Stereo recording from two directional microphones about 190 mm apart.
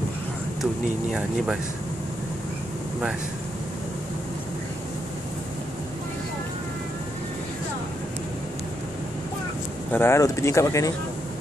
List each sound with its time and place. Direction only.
1.1 s speech: centre (ahead or behind)
9.9 s speech: 15° left (ahead or behind)